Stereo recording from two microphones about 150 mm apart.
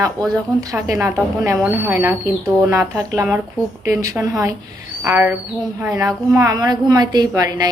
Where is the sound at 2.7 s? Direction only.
20° right (ahead or behind).